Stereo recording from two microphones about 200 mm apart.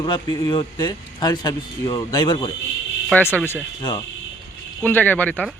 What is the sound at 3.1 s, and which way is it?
Speech, 10° left (ahead or behind).